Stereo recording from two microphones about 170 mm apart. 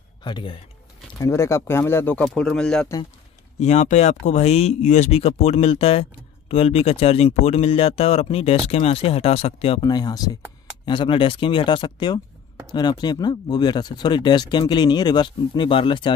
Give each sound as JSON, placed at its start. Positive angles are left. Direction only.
{"t": 0.2, "sound": "speech", "side_deg": 30}
{"t": 1.2, "sound": "speech", "side_deg": 15}
{"t": 3.5, "sound": "speech", "side_deg": 45}